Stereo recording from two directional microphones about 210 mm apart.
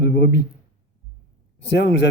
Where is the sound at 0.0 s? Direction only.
50° left (ahead or behind).